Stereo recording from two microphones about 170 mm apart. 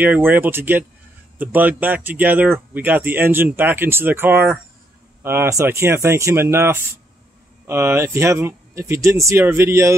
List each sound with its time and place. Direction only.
0.0 s speech: 10° right (ahead or behind)